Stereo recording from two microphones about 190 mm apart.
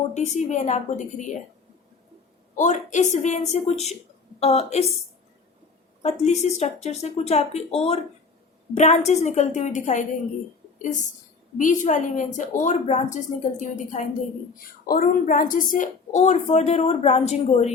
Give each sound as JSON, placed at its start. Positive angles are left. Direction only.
{"t": 0.1, "sound": "a woman's voice", "side_deg": 40}
{"t": 2.6, "sound": "a woman's voice", "side_deg": 40}
{"t": 6.0, "sound": "a woman's voice", "side_deg": 35}
{"t": 11.5, "sound": "a woman's voice", "side_deg": 40}